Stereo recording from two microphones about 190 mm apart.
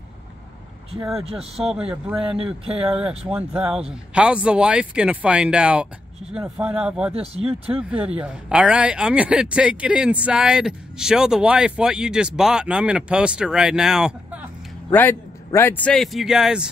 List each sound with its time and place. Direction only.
1.1 s a man's voice: 30° right (ahead or behind)
2.8 s speech: 5° right (ahead or behind)
7.2 s speech: 30° right (ahead or behind)
8.2 s speech: 5° right (ahead or behind)
14.9 s speech: 10° left (ahead or behind)